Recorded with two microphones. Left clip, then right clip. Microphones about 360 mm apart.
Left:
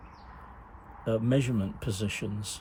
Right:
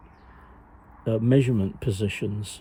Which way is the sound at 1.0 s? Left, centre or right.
Centre.